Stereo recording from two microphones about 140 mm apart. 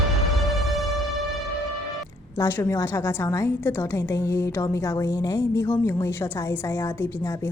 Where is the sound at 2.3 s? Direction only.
15° left (ahead or behind).